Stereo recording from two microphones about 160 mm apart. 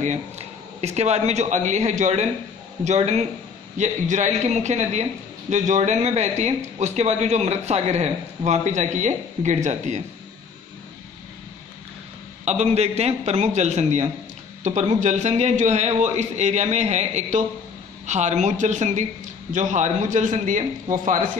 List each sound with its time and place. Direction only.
0.0 s a man's voice: 45° right (ahead or behind)
12.4 s a man's voice: 40° right (ahead or behind)